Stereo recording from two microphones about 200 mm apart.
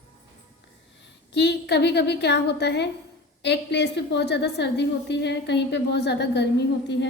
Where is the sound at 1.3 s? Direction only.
60° left (ahead or behind).